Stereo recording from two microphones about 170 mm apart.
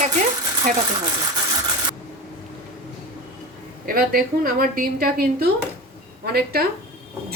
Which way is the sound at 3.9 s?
60° right (ahead or behind).